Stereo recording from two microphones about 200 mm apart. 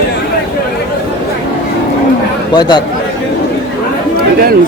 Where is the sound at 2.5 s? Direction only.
20° left (ahead or behind).